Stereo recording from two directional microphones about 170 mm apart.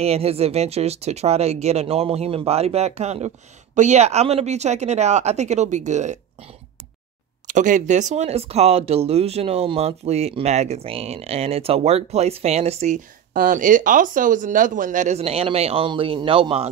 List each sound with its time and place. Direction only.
0.0 s speech: 35° right (ahead or behind)
7.4 s speech: 45° right (ahead or behind); by 16.6 s 30° right (ahead or behind)